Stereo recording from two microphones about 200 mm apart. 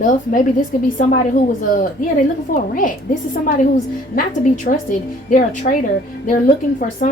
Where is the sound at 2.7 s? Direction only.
45° left (ahead or behind).